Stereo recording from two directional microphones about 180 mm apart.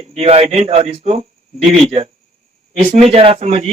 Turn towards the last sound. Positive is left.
turn(degrees=-35)  # may be behind; listen again after turning